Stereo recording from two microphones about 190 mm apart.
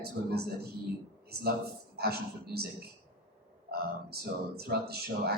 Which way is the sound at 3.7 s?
55° right (ahead or behind).